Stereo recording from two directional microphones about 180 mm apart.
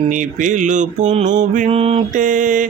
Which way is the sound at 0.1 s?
45° right (ahead or behind).